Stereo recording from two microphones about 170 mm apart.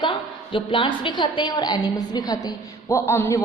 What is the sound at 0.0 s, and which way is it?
A woman's voice, 30° left (ahead or behind).